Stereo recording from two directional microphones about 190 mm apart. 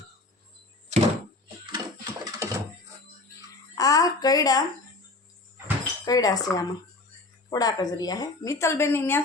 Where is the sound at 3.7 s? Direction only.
20° left (ahead or behind).